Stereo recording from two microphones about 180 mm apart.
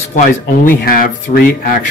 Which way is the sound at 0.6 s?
55° left (ahead or behind).